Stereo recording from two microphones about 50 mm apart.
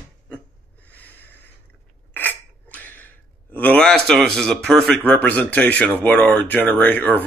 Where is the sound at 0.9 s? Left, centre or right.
Left.